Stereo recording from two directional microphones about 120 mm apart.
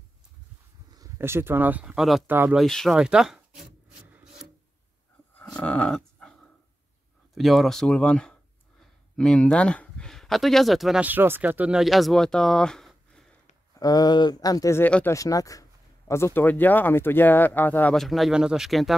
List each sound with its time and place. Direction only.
0.9 s speech: 25° right (ahead or behind); by 2.2 s centre (ahead or behind)
2.2 s speech: 20° right (ahead or behind)
2.5 s speech: centre (ahead or behind)
3.0 s a sound: 5° right (ahead or behind)
4.1 s rub: 5° right (ahead or behind)
5.6 s dog: 10° left (ahead or behind)
7.3 s speech: centre (ahead or behind)
11.0 s speech: 15° right (ahead or behind); by 13.2 s 5° left (ahead or behind)
13.7 s speech: 30° left (ahead or behind); by 17.9 s 15° left (ahead or behind)
17.9 s speech: centre (ahead or behind)